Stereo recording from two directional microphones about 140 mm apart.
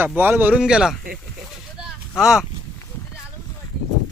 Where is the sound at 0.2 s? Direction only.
15° right (ahead or behind).